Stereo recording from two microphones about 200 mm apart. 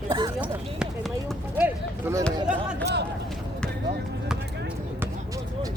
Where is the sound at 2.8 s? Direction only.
60° right (ahead or behind).